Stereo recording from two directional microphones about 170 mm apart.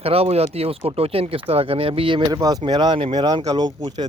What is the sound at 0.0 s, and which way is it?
Speech, 35° right (ahead or behind).